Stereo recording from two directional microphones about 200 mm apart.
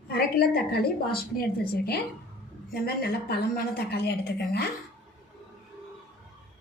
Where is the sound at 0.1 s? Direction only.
50° left (ahead or behind).